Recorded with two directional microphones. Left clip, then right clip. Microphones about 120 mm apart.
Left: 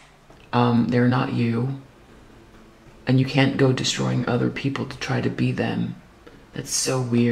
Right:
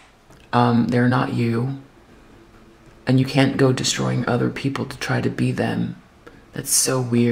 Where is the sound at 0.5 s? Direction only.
25° right (ahead or behind).